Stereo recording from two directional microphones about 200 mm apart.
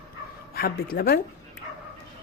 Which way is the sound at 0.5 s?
50° left (ahead or behind).